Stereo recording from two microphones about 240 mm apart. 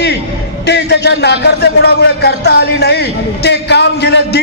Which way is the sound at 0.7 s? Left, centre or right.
Left.